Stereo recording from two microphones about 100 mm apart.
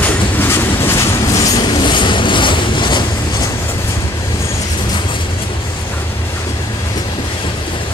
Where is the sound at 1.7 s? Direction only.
50° left (ahead or behind).